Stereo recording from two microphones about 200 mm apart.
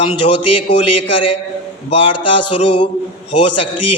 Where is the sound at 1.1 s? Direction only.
25° left (ahead or behind).